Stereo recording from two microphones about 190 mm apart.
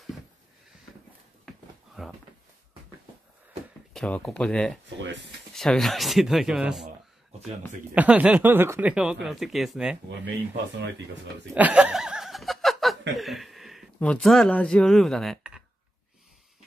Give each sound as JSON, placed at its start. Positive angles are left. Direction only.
{"t": 2.0, "sound": "a sound", "side_deg": 0}
{"t": 3.9, "sound": "speech", "side_deg": 5}
{"t": 4.8, "sound": "speech", "side_deg": -70}
{"t": 5.5, "sound": "speech", "side_deg": 0}
{"t": 7.9, "sound": "speech", "side_deg": -10}
{"t": 11.5, "sound": "laughter", "side_deg": -5}
{"t": 13.1, "sound": "chuckle", "side_deg": 0}
{"t": 13.9, "sound": "speech", "side_deg": 5}